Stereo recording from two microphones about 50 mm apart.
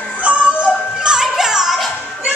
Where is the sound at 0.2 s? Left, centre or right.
Right.